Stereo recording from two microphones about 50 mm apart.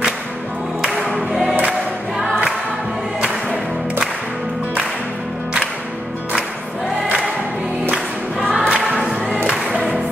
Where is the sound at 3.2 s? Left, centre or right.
Centre.